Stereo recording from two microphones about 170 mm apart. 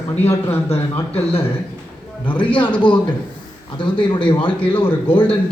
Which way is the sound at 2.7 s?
30° left (ahead or behind).